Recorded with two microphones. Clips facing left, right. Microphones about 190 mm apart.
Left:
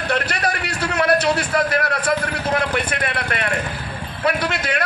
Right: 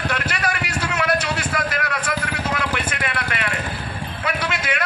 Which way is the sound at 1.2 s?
35° left (ahead or behind).